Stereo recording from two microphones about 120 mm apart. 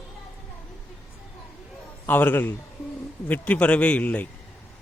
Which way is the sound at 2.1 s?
15° left (ahead or behind).